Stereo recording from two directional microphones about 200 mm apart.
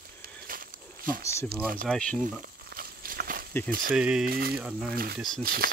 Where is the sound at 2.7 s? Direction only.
45° right (ahead or behind).